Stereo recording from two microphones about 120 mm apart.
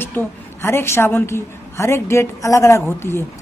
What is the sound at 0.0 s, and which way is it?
A woman's voice, 15° left (ahead or behind).